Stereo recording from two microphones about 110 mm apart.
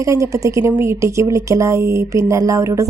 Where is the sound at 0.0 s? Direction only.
30° right (ahead or behind).